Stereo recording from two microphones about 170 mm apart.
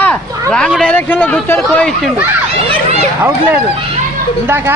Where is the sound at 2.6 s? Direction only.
35° right (ahead or behind).